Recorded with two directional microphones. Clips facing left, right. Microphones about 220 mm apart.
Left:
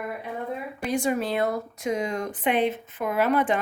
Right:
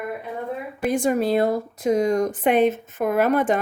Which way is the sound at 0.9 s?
45° right (ahead or behind).